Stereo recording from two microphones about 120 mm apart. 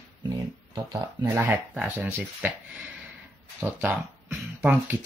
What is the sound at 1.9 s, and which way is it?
Speech, 15° right (ahead or behind).